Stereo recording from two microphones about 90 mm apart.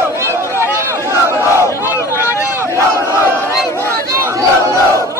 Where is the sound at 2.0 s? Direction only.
30° left (ahead or behind).